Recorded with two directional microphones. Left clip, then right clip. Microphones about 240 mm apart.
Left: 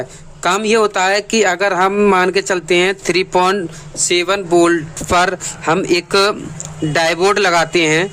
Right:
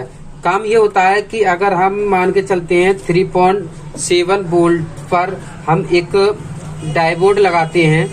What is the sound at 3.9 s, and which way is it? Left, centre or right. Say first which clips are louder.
Speech: right 2 dB; left.